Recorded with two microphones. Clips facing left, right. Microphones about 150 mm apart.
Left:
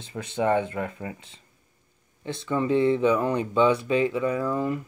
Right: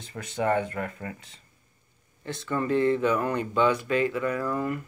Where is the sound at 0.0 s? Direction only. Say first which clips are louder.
Left 2 dB; 25° left (ahead or behind).